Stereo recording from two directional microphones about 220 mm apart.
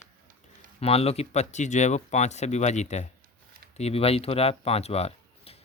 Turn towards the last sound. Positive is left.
turn(degrees=25)  # may be behind; listen again after turning